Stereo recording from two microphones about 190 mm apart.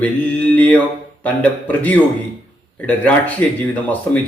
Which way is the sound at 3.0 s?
5° left (ahead or behind).